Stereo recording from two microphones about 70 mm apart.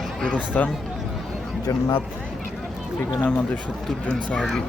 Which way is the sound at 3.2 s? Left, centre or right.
Centre.